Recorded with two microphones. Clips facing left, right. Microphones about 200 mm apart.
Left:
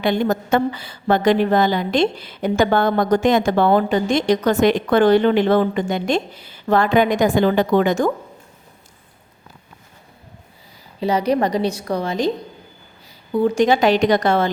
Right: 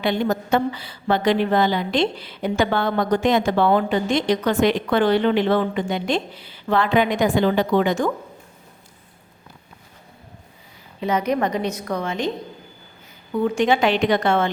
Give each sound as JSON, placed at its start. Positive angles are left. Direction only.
{"t": 0.0, "sound": "a woman's voice", "side_deg": 50}
{"t": 11.0, "sound": "a woman's voice", "side_deg": 35}
{"t": 13.3, "sound": "a woman's voice", "side_deg": 35}